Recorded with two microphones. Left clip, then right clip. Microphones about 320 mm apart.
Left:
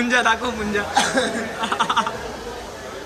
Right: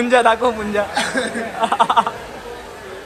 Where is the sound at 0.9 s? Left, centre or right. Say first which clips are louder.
Left 1 dB; centre.